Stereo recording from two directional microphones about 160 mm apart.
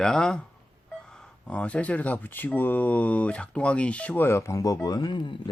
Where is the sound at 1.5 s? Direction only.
5° left (ahead or behind).